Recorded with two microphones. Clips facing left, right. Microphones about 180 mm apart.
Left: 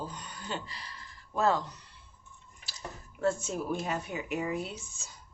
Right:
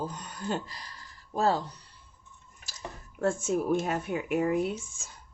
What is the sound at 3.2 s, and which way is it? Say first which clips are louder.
Speech: right 3 dB; 50° right (ahead or behind).